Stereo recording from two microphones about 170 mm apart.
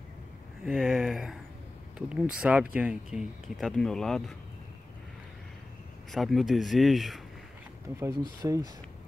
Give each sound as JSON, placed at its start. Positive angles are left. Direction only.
{"t": 0.7, "sound": "speech", "side_deg": 0}
{"t": 6.1, "sound": "speech", "side_deg": 0}
{"t": 8.0, "sound": "speech", "side_deg": -20}